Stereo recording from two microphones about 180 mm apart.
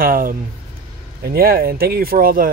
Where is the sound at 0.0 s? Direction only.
50° right (ahead or behind).